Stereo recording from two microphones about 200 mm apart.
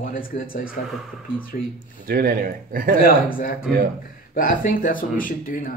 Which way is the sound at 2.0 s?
45° right (ahead or behind).